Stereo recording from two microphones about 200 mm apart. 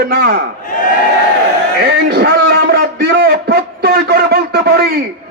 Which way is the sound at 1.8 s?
50° right (ahead or behind).